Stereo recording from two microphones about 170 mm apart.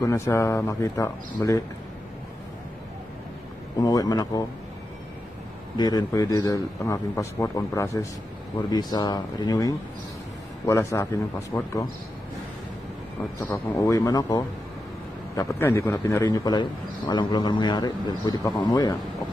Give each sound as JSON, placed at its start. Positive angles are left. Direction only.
{"t": 0.0, "sound": "a man's voice", "side_deg": 20}
{"t": 3.8, "sound": "a man's voice", "side_deg": 20}
{"t": 5.8, "sound": "a man's voice", "side_deg": 20}
{"t": 13.4, "sound": "a man's voice", "side_deg": 15}